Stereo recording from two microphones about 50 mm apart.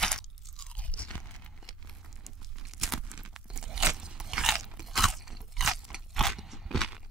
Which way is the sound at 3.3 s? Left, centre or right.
Centre.